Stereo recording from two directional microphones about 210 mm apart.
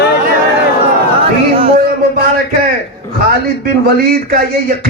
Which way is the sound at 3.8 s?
50° right (ahead or behind).